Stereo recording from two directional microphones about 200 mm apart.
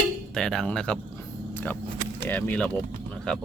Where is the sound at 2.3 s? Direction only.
10° left (ahead or behind).